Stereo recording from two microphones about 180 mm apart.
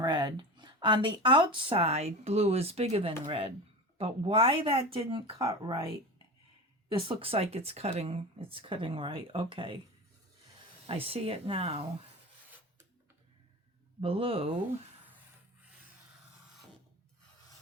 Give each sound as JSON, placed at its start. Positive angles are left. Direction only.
{"t": 0.0, "sound": "speech", "side_deg": -20}
{"t": 10.8, "sound": "speech", "side_deg": -30}
{"t": 14.0, "sound": "speech", "side_deg": -30}